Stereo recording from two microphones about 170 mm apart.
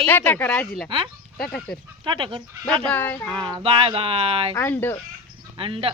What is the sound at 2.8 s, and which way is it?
Speech, 10° left (ahead or behind).